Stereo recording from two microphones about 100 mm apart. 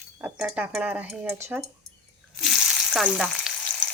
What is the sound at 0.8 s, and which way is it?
Speech, 15° right (ahead or behind).